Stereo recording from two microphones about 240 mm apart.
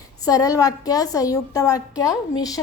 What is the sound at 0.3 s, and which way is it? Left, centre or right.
A woman's voice, centre.